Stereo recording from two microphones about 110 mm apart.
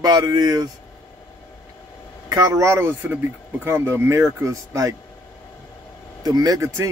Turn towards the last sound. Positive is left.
turn(degrees=-30)  # may be behind; listen again after turning